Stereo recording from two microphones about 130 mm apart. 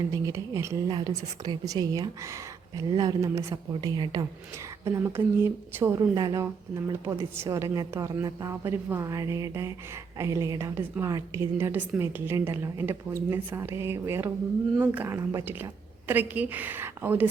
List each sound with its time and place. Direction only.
0.1 s a woman's voice: 25° right (ahead or behind)
4.9 s a woman's voice: 20° right (ahead or behind)